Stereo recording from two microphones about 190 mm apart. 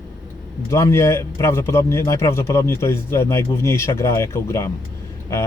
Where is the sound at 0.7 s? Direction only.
15° left (ahead or behind).